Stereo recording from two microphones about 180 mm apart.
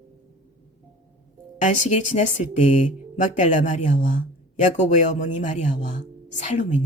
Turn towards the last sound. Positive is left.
turn(degrees=40)  # may be behind; listen again after turning